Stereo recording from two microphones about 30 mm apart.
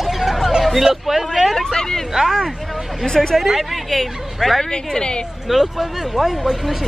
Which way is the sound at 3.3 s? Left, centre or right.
Centre.